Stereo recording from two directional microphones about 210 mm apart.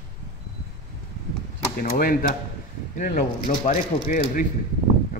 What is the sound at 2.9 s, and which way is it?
A man's voice, 35° left (ahead or behind).